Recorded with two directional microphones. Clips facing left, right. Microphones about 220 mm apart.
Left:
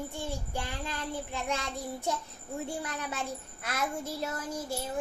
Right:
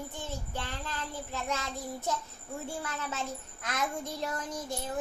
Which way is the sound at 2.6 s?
15° left (ahead or behind).